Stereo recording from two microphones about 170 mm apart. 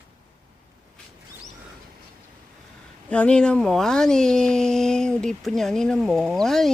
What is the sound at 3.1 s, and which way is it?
Speech, 5° left (ahead or behind).